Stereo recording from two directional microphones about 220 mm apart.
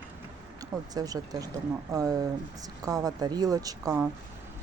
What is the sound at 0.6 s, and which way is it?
Speech, 15° right (ahead or behind).